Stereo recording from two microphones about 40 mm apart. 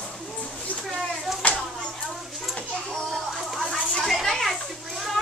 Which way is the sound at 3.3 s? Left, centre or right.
Centre.